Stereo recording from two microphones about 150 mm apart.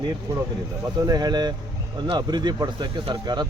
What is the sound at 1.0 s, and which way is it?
Speech, 25° right (ahead or behind).